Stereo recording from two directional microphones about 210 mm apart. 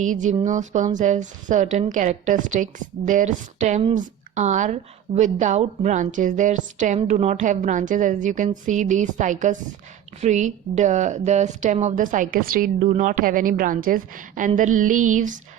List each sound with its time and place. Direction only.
0.0 s a woman's voice: 35° right (ahead or behind)